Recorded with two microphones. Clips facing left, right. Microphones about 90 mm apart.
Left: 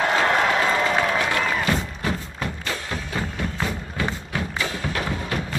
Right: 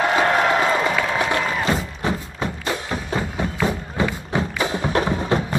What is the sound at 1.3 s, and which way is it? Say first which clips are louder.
Music: right 2 dB; 20° right (ahead or behind).